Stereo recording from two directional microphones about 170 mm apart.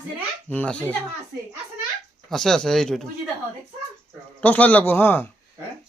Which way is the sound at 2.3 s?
5° left (ahead or behind).